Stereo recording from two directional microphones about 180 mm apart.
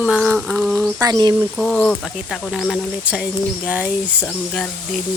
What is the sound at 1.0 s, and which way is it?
Speech, 20° right (ahead or behind).